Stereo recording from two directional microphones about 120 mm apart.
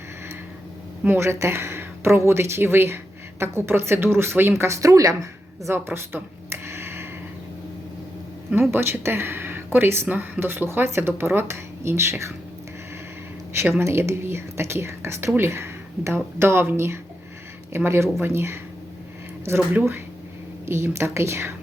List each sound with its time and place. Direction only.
1.0 s speech: 20° right (ahead or behind)
8.7 s speech: 20° right (ahead or behind)
13.5 s speech: 20° right (ahead or behind)